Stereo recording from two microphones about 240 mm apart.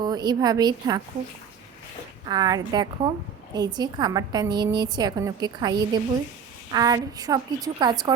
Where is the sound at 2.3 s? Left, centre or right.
Centre.